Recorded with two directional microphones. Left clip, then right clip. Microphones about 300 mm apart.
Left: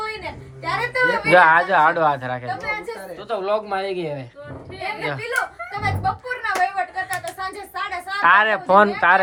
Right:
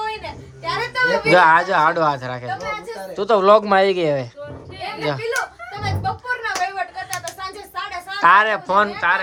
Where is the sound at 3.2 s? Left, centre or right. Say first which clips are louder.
Right 10 dB; right.